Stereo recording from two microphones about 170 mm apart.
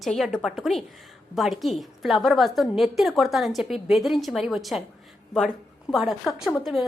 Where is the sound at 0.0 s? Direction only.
Centre (ahead or behind).